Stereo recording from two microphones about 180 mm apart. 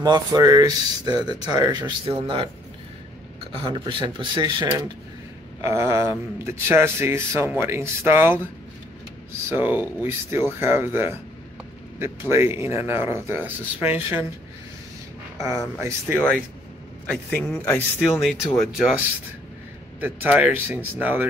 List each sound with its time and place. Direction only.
0.0 s speech: 20° right (ahead or behind)
3.6 s speech: 25° right (ahead or behind)
9.5 s speech: 10° right (ahead or behind)
15.3 s speech: 15° right (ahead or behind)
17.1 s a man's voice: 10° left (ahead or behind); by 21.3 s 10° right (ahead or behind)